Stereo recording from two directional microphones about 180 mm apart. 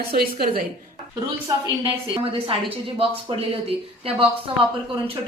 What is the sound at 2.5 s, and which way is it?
Speech, 30° right (ahead or behind).